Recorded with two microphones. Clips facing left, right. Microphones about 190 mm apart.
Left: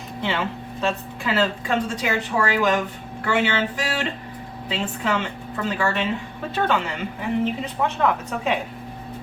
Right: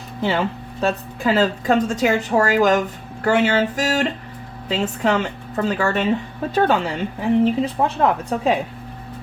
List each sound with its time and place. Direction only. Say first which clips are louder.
0.2 s a woman's voice: right 5 dB; 40° right (ahead or behind)